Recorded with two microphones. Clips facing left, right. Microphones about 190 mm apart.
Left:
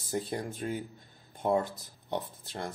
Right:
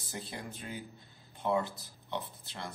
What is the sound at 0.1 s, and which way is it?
Speech, 50° left (ahead or behind).